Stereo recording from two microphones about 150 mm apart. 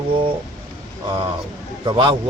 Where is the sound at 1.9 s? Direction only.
35° right (ahead or behind).